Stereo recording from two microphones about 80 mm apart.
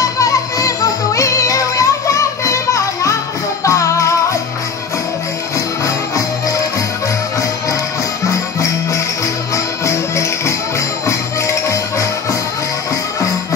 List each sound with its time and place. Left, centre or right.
0.0 s music: left
8.5 s music: left